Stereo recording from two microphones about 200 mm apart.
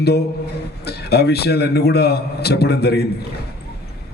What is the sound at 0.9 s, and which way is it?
A man's voice, 55° left (ahead or behind).